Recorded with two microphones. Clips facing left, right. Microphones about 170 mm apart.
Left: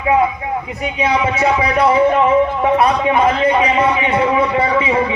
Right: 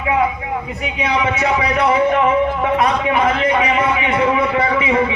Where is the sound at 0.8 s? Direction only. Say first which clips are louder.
Left 3 dB; 30° left (ahead or behind).